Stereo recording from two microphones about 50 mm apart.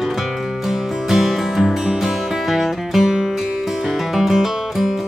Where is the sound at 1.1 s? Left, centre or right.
Centre.